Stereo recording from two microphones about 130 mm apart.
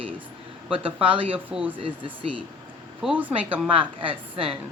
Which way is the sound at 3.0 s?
10° right (ahead or behind).